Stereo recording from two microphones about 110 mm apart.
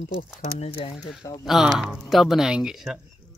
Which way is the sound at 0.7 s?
55° left (ahead or behind).